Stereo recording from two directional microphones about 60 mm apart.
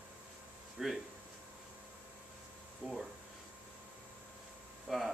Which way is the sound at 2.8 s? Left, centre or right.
Centre.